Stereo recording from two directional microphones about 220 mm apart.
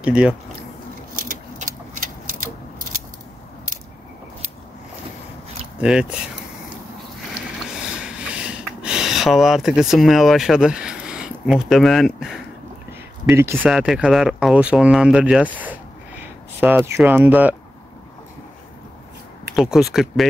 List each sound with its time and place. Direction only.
0.0 s speech: 5° right (ahead or behind)
1.1 s keys jangling: 40° right (ahead or behind)
5.8 s speech: 5° right (ahead or behind)
7.8 s a sound: 5° right (ahead or behind)
13.2 s speech: 10° right (ahead or behind)
15.5 s a sound: 5° right (ahead or behind)
16.5 s speech: 10° right (ahead or behind)
19.5 s speech: centre (ahead or behind)